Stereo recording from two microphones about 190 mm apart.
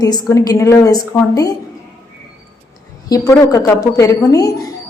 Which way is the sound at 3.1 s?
20° left (ahead or behind).